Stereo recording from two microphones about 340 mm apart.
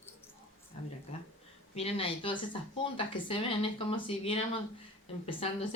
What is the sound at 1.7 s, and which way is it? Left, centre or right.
Speech, centre.